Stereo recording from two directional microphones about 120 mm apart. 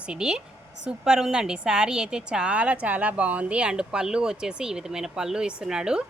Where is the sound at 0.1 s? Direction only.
5° right (ahead or behind).